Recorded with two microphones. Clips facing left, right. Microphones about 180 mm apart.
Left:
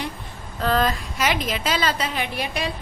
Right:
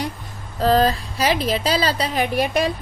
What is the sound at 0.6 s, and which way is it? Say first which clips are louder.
A woman's voice: right 5 dB; 35° right (ahead or behind).